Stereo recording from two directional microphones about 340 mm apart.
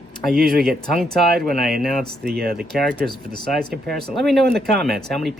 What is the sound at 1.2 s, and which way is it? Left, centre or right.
Speech, right.